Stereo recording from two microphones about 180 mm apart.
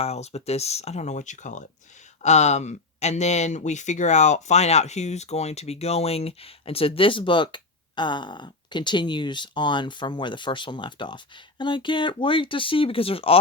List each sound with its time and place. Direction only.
0.0 s speech: 35° left (ahead or behind)